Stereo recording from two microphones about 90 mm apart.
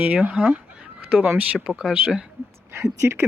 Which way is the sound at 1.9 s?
10° right (ahead or behind).